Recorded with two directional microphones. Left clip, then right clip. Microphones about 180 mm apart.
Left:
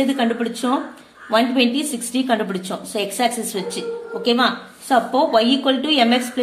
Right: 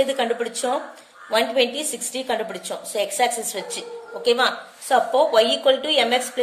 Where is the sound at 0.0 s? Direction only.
25° right (ahead or behind).